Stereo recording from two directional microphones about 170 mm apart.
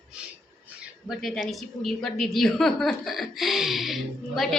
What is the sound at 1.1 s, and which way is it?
Speech, centre (ahead or behind).